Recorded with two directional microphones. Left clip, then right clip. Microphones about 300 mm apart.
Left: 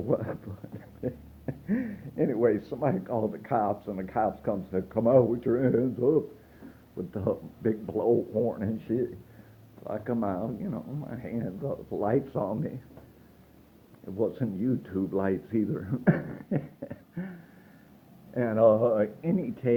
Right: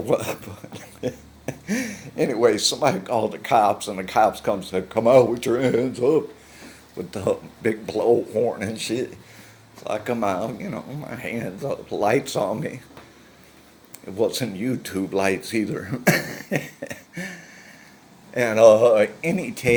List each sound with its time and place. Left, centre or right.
0.1 s speech: centre
14.3 s speech: centre
18.3 s speech: centre